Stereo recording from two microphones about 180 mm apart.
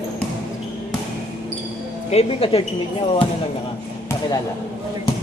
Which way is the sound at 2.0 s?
35° left (ahead or behind).